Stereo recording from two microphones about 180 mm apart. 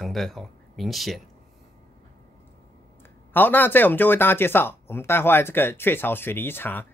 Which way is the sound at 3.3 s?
10° left (ahead or behind).